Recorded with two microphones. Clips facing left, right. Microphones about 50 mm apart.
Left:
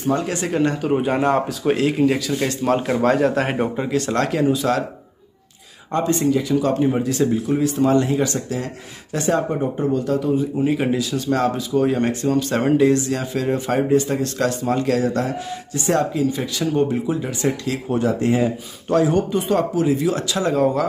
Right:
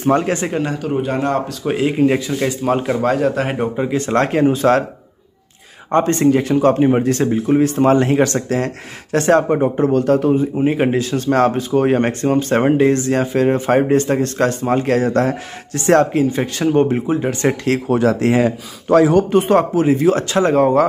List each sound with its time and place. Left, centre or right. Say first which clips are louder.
0.2 s speech: right 5 dB; right
0.5 s a man's voice: left 1 dB; centre
0.8 s a man's voice: even; centre
1.6 s speech: right 2 dB; centre
2.3 s a man's voice: right 2 dB; centre
3.9 s speech: right 5 dB; right
5.9 s speech: right 5 dB; right
7.2 s speech: right 5 dB; right
10.6 s speech: right 4 dB; right
15.7 s speech: right 7 dB; right
17.8 s speech: right 3 dB; right
19.3 s speech: right 6 dB; right